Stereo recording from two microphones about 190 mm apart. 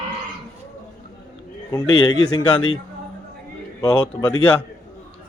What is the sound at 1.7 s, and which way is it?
Speech, 20° left (ahead or behind).